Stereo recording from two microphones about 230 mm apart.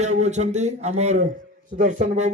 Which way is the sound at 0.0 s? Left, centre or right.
Right.